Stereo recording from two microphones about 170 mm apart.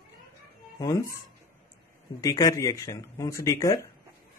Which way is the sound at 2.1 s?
20° left (ahead or behind).